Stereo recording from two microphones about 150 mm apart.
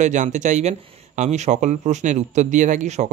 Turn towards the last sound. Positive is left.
turn(degrees=-50)  # may be behind; listen again after turning